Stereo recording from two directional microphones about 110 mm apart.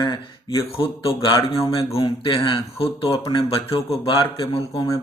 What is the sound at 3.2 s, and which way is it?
A man's voice, 50° left (ahead or behind).